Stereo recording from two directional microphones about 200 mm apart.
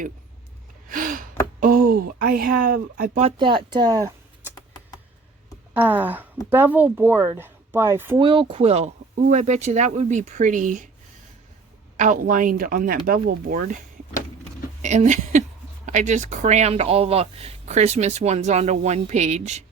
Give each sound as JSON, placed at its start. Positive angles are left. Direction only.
{"t": 0.9, "sound": "gasp", "side_deg": -45}
{"t": 1.6, "sound": "speech", "side_deg": -45}
{"t": 3.2, "sound": "speech", "side_deg": -25}
{"t": 5.7, "sound": "speech", "side_deg": -10}
{"t": 8.2, "sound": "speech", "side_deg": -25}
{"t": 11.9, "sound": "speech", "side_deg": -40}
{"t": 14.8, "sound": "speech", "side_deg": -35}